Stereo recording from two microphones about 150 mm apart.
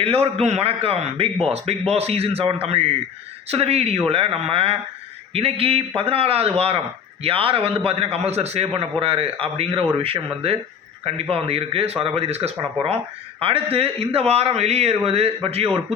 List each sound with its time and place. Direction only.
0.0 s a man's voice: 40° right (ahead or behind)